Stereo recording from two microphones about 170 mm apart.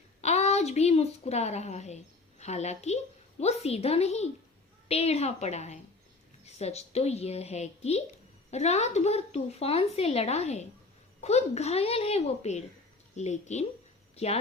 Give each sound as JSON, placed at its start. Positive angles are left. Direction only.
{"t": 0.2, "sound": "a woman's voice", "side_deg": 40}